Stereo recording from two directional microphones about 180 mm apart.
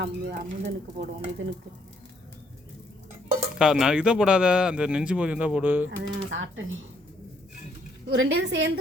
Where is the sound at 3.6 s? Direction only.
5° right (ahead or behind).